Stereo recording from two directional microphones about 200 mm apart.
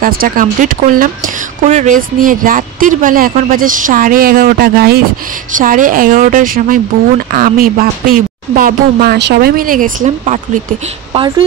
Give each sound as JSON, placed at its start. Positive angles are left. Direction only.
{"t": 0.0, "sound": "speech", "side_deg": -45}